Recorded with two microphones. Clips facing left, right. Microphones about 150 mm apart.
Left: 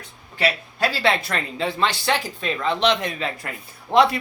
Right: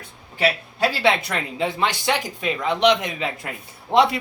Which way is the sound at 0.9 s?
20° right (ahead or behind).